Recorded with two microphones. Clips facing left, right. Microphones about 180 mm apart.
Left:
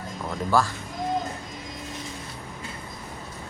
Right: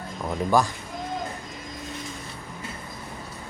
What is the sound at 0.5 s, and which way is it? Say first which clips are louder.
Speech: right 1 dB; 15° right (ahead or behind).